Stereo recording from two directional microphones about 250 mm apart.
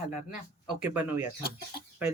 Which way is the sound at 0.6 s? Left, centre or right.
Centre.